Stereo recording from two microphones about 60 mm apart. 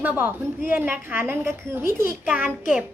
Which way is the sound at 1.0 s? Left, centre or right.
Right.